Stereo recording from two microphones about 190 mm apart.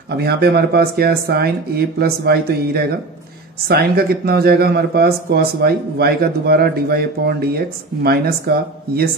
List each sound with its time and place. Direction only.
0.1 s speech: 55° right (ahead or behind)